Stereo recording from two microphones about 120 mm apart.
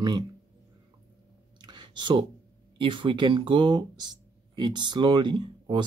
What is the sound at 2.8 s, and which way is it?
Speech, 45° right (ahead or behind).